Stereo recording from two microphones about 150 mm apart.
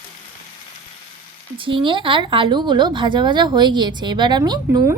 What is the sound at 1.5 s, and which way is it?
A woman's voice, 35° right (ahead or behind).